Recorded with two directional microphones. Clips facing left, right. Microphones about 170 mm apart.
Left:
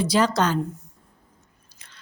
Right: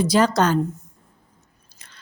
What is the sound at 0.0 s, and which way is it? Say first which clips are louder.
Speech: right 3 dB; 45° right (ahead or behind).